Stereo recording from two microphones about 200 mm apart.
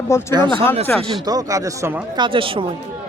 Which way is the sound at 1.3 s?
15° right (ahead or behind).